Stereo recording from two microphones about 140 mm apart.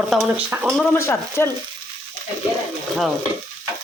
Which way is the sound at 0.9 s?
20° left (ahead or behind).